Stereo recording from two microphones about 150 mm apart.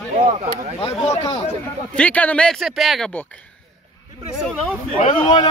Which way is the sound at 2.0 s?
10° left (ahead or behind).